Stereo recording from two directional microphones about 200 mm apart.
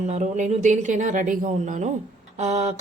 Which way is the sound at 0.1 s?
35° right (ahead or behind).